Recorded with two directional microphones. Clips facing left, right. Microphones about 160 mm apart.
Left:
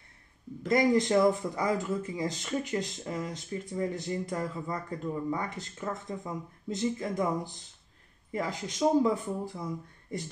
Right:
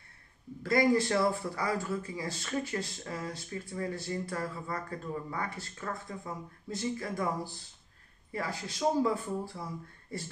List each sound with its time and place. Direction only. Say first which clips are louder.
0.6 s speech: left 2 dB; 20° left (ahead or behind)